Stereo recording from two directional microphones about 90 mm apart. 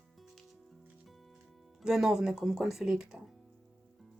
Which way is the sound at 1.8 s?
5° right (ahead or behind).